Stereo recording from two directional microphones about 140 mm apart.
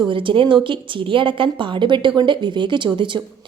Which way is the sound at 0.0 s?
35° right (ahead or behind).